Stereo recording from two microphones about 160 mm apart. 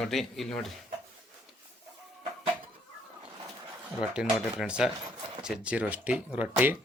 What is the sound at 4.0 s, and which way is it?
Speech, 5° right (ahead or behind).